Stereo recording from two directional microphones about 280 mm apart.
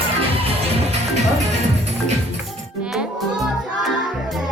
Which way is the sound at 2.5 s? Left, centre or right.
Centre.